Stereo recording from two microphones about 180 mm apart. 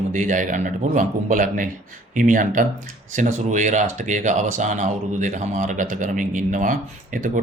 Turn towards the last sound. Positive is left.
turn(degrees=-50)  # may be behind; listen again after turning